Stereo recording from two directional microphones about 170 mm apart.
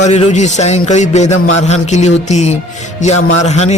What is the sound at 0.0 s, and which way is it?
A man's voice, 40° left (ahead or behind).